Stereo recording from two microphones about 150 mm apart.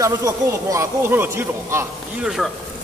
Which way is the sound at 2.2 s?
Centre (ahead or behind).